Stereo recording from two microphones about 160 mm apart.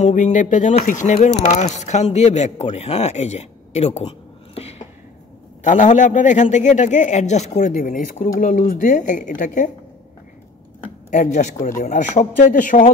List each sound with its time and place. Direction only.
0.0 s speech: 50° left (ahead or behind)
4.6 s a sound: 40° left (ahead or behind)
5.6 s speech: 50° left (ahead or behind)
11.1 s speech: 50° left (ahead or behind)